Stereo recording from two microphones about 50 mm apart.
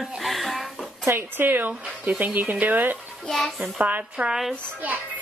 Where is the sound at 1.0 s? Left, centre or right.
Right.